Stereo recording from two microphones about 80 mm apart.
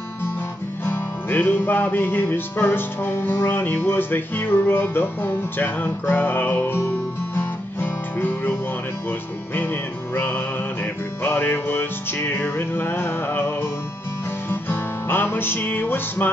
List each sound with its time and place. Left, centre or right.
0.8 s music: left
9.6 s music: left